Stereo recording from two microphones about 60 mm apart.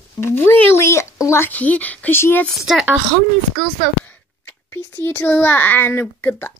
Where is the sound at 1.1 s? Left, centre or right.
Left.